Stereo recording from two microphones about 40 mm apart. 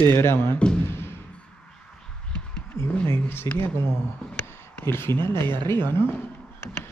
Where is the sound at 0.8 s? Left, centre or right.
Left.